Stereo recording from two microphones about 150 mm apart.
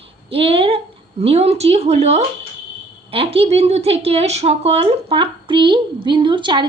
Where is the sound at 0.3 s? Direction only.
40° right (ahead or behind).